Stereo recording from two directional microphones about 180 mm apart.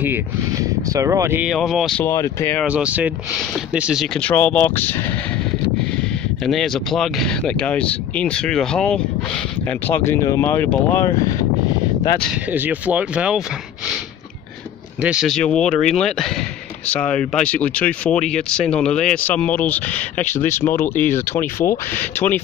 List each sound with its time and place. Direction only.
0.0 s speech: 15° right (ahead or behind)
1.5 s speech: centre (ahead or behind)
2.0 s speech: 15° left (ahead or behind)
2.6 s speech: 10° right (ahead or behind); by 5.1 s 10° left (ahead or behind)
6.4 s speech: centre (ahead or behind)
12.4 s speech: 10° right (ahead or behind)
15.0 s speech: 5° right (ahead or behind); by 22.4 s 10° left (ahead or behind)